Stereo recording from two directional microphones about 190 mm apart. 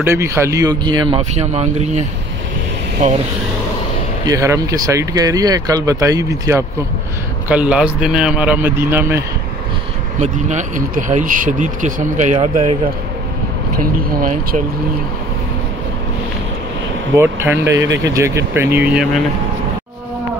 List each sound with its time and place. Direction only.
0.0 s speech: 15° right (ahead or behind); by 2.0 s 35° right (ahead or behind)
4.3 s speech: 15° right (ahead or behind)
10.2 s speech: 40° right (ahead or behind)
13.7 s speech: 50° right (ahead or behind)
17.1 s speech: 10° right (ahead or behind)